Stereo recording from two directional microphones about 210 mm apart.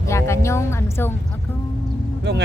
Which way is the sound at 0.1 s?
15° left (ahead or behind).